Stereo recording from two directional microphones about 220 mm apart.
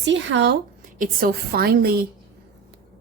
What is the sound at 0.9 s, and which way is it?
A woman's voice, 40° right (ahead or behind).